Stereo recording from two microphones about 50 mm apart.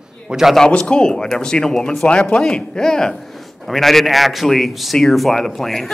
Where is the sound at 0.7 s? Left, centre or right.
Centre.